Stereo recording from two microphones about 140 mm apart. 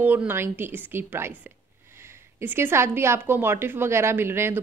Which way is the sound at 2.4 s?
15° right (ahead or behind).